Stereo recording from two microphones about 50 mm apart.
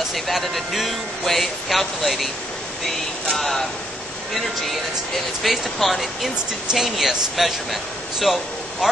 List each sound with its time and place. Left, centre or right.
0.1 s speech: centre